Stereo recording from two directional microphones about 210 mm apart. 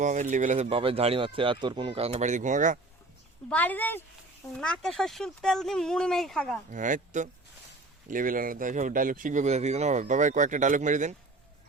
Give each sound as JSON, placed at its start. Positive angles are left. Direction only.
{"t": 0.0, "sound": "speech", "side_deg": -35}
{"t": 3.5, "sound": "speech", "side_deg": 10}
{"t": 6.7, "sound": "speech", "side_deg": -40}